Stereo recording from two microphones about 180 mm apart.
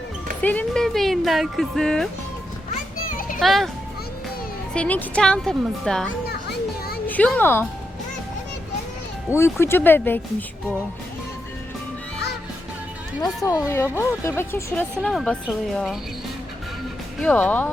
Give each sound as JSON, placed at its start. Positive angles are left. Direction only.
{"t": 0.4, "sound": "speech", "side_deg": 5}
{"t": 3.2, "sound": "children playing", "side_deg": 50}
{"t": 3.4, "sound": "speech", "side_deg": 0}
{"t": 4.7, "sound": "speech", "side_deg": 5}
{"t": 6.2, "sound": "music", "side_deg": 60}
{"t": 7.1, "sound": "speech", "side_deg": 10}
{"t": 9.3, "sound": "speech", "side_deg": 15}
{"t": 13.2, "sound": "speech", "side_deg": 20}
{"t": 15.0, "sound": "speech", "side_deg": 0}
{"t": 17.2, "sound": "speech", "side_deg": 10}